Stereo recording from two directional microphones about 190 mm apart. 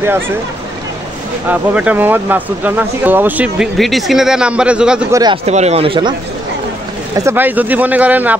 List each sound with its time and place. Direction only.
1.5 s speech: 10° right (ahead or behind)
5.1 s speech: 20° right (ahead or behind)
5.4 s speech: 35° right (ahead or behind)
7.2 s speech: 10° right (ahead or behind)